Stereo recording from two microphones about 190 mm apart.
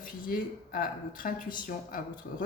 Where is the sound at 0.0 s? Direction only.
50° left (ahead or behind).